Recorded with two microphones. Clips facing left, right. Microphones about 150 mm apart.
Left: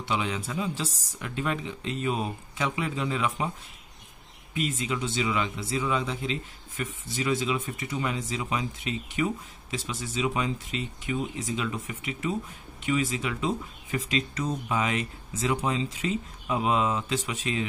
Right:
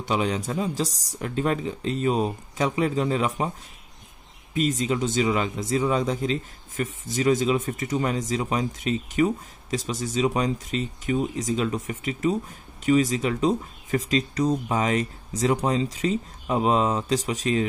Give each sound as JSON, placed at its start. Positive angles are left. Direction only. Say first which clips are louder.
{"t": 0.0, "sound": "speech", "louder": "right 5 dB", "side_deg": -40}
{"t": 4.6, "sound": "speech", "louder": "right 6 dB", "side_deg": -40}